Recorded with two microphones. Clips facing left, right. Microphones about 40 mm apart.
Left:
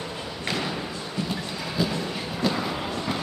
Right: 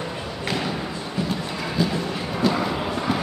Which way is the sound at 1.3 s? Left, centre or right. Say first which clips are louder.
Right 4 dB; centre.